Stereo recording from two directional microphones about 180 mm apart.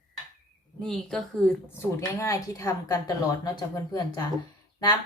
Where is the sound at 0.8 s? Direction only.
5° left (ahead or behind).